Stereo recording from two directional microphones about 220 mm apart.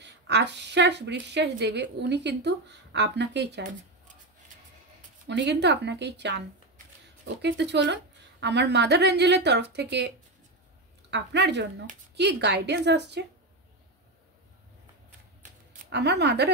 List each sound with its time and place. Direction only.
0.0 s speech: 50° right (ahead or behind)
5.2 s speech: 50° right (ahead or behind)
7.4 s speech: 50° right (ahead or behind)
15.9 s speech: 50° right (ahead or behind)